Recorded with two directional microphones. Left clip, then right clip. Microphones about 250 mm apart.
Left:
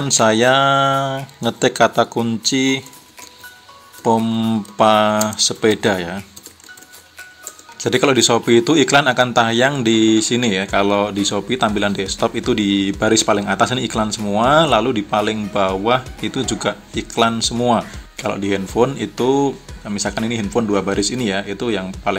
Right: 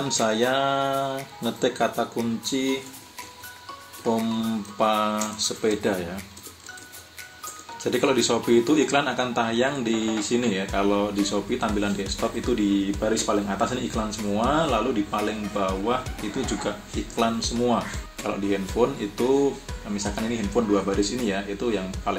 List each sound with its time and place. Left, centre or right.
0.0 s speech: left
4.0 s speech: left
7.8 s speech: left